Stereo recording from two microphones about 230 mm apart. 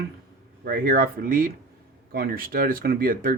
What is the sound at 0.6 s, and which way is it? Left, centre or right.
Speech, right.